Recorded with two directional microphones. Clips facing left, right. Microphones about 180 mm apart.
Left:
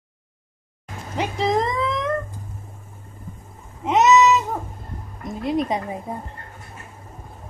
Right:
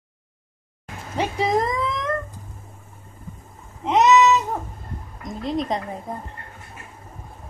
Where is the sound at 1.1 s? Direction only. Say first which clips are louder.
Even; centre (ahead or behind).